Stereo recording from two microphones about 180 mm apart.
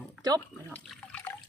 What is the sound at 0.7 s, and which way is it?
Water, 10° left (ahead or behind).